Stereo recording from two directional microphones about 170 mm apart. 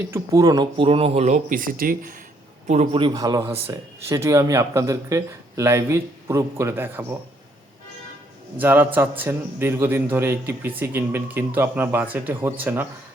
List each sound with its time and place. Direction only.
0.1 s speech: 20° right (ahead or behind); by 2.1 s 55° right (ahead or behind)
2.6 s speech: 35° right (ahead or behind); by 7.2 s 10° right (ahead or behind)
8.5 s speech: 10° right (ahead or behind)